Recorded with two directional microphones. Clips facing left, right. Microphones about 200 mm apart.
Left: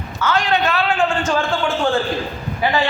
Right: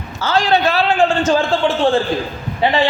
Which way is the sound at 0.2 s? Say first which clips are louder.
Right 3 dB; 30° right (ahead or behind).